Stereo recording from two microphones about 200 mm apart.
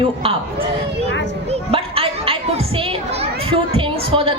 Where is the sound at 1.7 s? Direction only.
30° right (ahead or behind).